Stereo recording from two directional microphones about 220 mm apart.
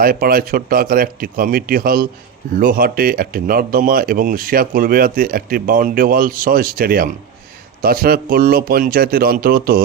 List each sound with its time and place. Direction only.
0.0 s speech: 40° right (ahead or behind)